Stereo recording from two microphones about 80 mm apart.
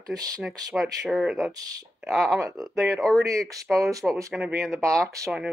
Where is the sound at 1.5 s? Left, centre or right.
Right.